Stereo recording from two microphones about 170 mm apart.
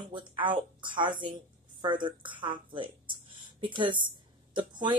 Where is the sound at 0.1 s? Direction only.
30° right (ahead or behind).